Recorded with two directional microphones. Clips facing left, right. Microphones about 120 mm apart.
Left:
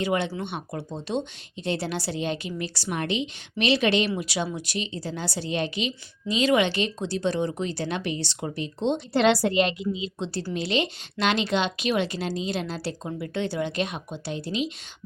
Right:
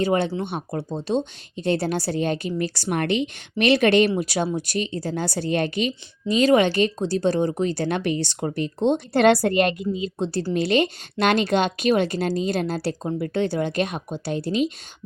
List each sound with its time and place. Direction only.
0.0 s speech: 40° right (ahead or behind)